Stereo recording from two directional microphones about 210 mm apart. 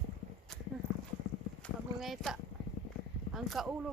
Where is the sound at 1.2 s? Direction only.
65° left (ahead or behind).